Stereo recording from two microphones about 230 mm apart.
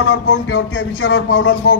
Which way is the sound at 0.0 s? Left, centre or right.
Left.